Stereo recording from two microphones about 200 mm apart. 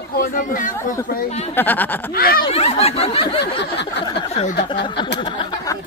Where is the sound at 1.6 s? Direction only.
10° left (ahead or behind).